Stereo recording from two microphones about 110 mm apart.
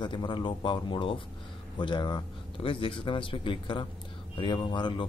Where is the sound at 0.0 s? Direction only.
45° left (ahead or behind).